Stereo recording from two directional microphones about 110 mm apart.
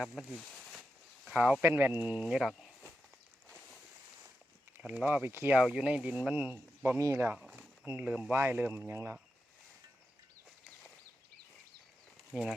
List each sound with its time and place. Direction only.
0.0 s speech: 5° left (ahead or behind)
0.3 s a sound: centre (ahead or behind)
1.6 s speech: 15° right (ahead or behind)
2.2 s speech: centre (ahead or behind)
4.8 s speech: 10° right (ahead or behind); by 7.3 s 25° right (ahead or behind)
7.3 s speech: 10° right (ahead or behind); by 9.1 s 25° right (ahead or behind)
12.3 s speech: centre (ahead or behind)